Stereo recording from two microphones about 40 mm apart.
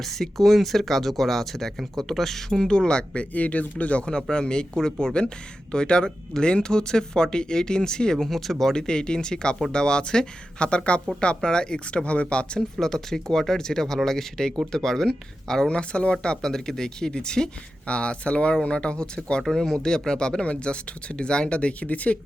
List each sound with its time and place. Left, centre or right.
0.0 s speech: centre
2.6 s speech: left
3.3 s speech: left
4.0 s speech: centre
8.9 s speech: centre
12.8 s speech: centre
15.7 s speech: left
16.4 s speech: centre
19.4 s speech: centre; by 22.2 s left